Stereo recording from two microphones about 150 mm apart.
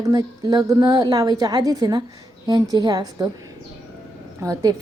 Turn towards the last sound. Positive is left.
turn(degrees=-25)  # may be behind; listen again after turning